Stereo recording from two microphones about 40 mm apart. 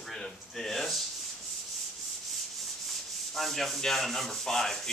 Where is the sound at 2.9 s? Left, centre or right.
Centre.